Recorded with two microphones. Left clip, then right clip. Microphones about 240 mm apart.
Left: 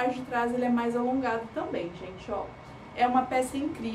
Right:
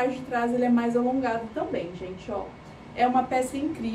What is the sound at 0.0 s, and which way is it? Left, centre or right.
A woman's voice, centre.